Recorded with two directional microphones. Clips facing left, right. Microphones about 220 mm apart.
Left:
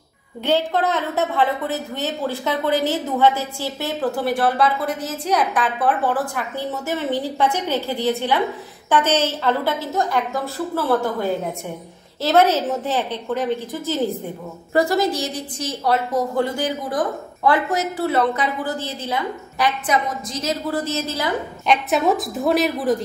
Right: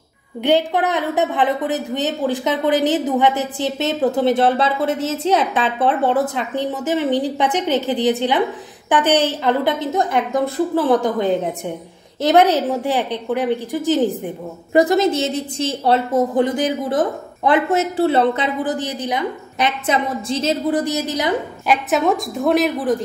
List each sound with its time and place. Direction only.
0.4 s a woman's voice: 15° right (ahead or behind)
21.6 s a woman's voice: centre (ahead or behind)